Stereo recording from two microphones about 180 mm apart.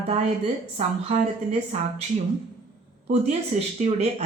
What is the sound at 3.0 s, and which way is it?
A woman's voice, 40° right (ahead or behind).